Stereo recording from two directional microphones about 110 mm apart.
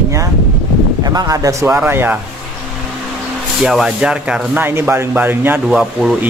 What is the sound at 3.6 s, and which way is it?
Speech, 5° right (ahead or behind).